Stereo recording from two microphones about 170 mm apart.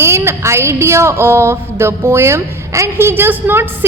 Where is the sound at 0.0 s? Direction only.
15° right (ahead or behind).